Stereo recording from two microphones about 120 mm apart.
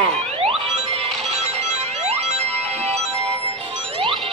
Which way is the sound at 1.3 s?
65° right (ahead or behind).